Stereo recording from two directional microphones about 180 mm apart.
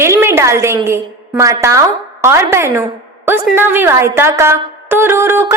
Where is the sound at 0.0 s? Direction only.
15° right (ahead or behind).